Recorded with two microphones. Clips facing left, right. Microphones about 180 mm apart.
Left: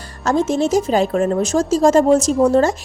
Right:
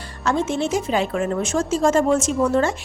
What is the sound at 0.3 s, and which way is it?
Speech, 40° left (ahead or behind).